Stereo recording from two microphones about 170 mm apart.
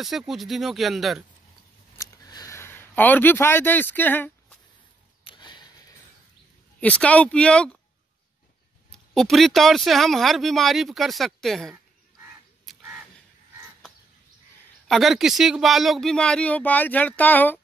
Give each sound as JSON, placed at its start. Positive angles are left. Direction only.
{"t": 0.0, "sound": "speech", "side_deg": 0}
{"t": 2.0, "sound": "a sound", "side_deg": 20}
{"t": 5.2, "sound": "a sound", "side_deg": 25}
{"t": 6.8, "sound": "speech", "side_deg": 10}
{"t": 8.9, "sound": "speech", "side_deg": 0}
{"t": 12.6, "sound": "crow", "side_deg": -5}
{"t": 14.9, "sound": "speech", "side_deg": 0}